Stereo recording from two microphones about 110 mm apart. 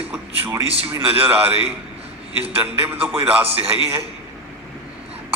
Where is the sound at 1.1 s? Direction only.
15° right (ahead or behind).